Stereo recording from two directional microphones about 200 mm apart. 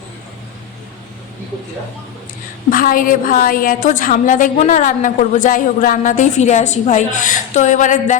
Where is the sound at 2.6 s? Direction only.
45° left (ahead or behind).